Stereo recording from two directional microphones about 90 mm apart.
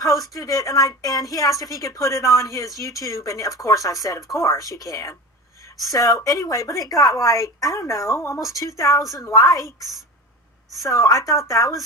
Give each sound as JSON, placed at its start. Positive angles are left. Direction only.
{"t": 0.2, "sound": "speech", "side_deg": 40}
{"t": 10.9, "sound": "speech", "side_deg": 40}